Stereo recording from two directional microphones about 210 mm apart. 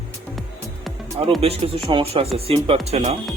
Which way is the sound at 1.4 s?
25° right (ahead or behind).